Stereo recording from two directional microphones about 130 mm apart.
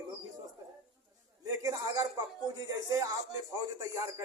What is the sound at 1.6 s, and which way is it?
Speech, 25° right (ahead or behind).